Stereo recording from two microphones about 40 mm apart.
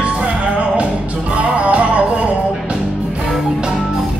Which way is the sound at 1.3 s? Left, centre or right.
Right.